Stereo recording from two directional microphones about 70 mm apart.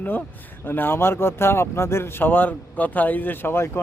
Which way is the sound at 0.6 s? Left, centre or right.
Left.